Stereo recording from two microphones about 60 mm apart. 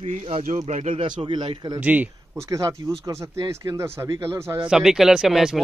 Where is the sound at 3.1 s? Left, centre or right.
Right.